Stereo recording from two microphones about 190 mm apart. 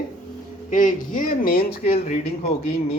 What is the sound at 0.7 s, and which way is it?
Speech, 45° left (ahead or behind).